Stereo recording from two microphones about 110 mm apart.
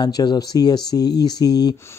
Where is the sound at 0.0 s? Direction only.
40° left (ahead or behind).